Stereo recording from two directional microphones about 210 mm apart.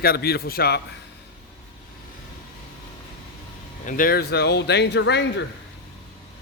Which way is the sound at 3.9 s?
40° left (ahead or behind).